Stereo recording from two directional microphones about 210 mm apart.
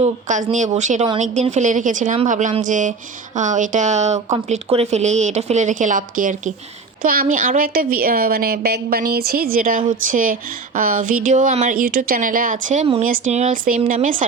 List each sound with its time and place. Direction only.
0.0 s a woman's voice: 35° right (ahead or behind)